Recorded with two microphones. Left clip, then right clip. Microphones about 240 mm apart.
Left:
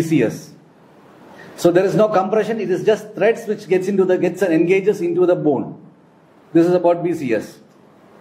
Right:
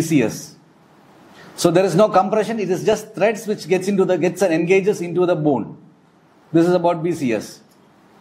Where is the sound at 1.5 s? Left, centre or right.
Right.